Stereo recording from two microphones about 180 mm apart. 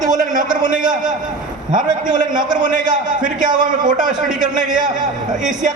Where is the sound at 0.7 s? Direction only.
45° right (ahead or behind).